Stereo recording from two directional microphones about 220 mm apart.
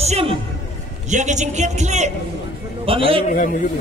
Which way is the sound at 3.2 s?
35° left (ahead or behind).